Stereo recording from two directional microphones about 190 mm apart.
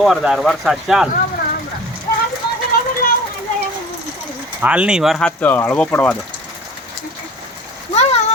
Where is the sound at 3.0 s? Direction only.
50° left (ahead or behind).